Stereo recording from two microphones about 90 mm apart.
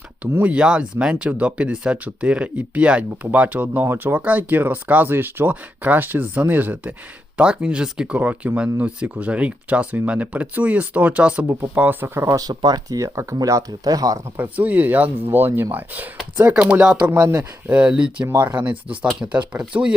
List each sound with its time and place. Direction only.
0.2 s speech: 15° right (ahead or behind); by 14.2 s 45° right (ahead or behind)
14.3 s speech: 20° right (ahead or behind)
18.3 s speech: 20° right (ahead or behind)
19.2 s speech: 30° right (ahead or behind)